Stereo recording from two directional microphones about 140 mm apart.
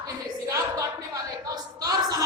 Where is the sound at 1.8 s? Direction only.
25° right (ahead or behind).